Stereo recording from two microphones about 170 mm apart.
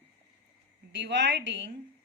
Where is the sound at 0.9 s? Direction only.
90° right.